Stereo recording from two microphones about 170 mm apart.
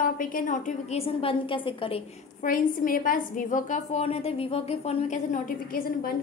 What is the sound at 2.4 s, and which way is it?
A woman's voice, 55° left (ahead or behind).